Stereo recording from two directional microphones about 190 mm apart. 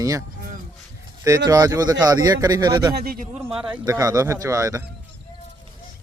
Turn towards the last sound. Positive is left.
turn(degrees=-15)  # may be behind; listen again after turning